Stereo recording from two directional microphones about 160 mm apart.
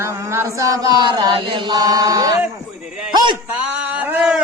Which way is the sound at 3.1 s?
25° right (ahead or behind).